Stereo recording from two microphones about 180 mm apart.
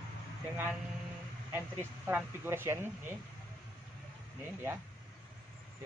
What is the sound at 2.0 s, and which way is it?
A man's voice, 10° right (ahead or behind).